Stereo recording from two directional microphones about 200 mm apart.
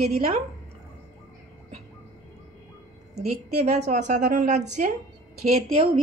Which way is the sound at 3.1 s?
35° right (ahead or behind).